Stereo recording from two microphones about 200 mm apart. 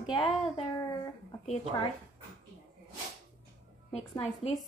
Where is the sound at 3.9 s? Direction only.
30° left (ahead or behind).